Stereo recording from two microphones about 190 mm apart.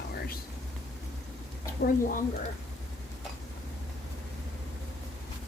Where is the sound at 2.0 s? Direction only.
45° left (ahead or behind).